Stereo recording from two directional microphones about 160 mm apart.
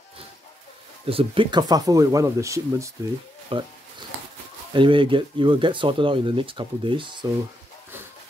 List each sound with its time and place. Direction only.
1.0 s speech: 35° right (ahead or behind); by 2.9 s 20° right (ahead or behind)
3.5 s speech: 35° right (ahead or behind)
4.7 s speech: 30° right (ahead or behind)